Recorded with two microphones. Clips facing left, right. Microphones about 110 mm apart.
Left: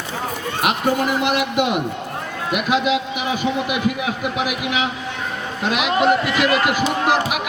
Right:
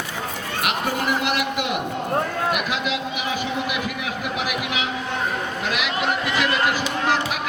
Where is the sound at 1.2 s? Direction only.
20° left (ahead or behind).